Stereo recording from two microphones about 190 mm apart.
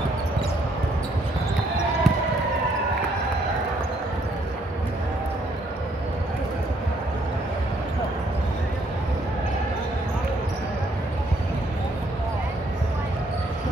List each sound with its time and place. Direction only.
2.1 s basketball bounce: centre (ahead or behind)